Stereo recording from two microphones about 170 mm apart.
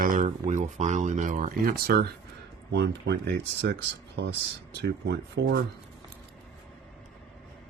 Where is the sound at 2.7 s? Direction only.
85° right.